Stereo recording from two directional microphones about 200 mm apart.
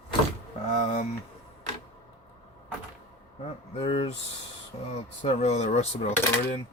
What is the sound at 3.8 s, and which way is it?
Speech, 30° left (ahead or behind).